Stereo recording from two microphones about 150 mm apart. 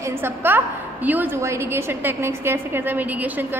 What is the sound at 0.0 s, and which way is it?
A woman's voice, 15° right (ahead or behind).